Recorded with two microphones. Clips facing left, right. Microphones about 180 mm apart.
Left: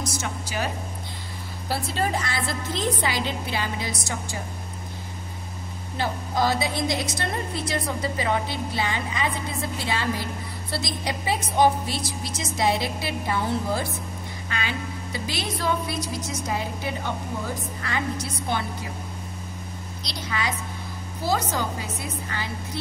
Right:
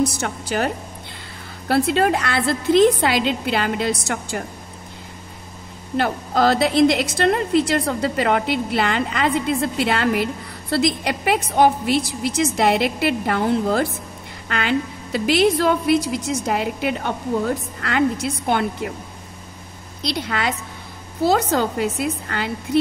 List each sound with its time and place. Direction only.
0.2 s a woman's voice: 60° right (ahead or behind)
1.7 s a woman's voice: 70° right (ahead or behind)
5.9 s a woman's voice: 70° right (ahead or behind)
20.0 s a woman's voice: 60° right (ahead or behind)